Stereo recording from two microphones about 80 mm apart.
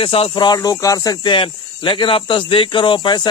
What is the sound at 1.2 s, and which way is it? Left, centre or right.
Speech, left.